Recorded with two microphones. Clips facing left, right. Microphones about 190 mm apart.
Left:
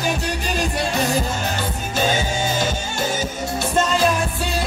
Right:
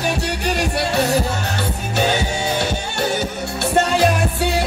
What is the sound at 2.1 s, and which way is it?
Music, 65° right (ahead or behind).